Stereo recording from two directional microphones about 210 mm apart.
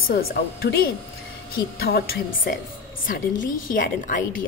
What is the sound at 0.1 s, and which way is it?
A woman's voice, 45° left (ahead or behind).